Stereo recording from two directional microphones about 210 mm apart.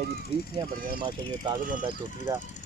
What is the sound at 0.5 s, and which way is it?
Speech, 20° right (ahead or behind).